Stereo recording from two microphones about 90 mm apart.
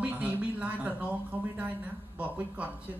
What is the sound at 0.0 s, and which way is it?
Speech, 15° right (ahead or behind).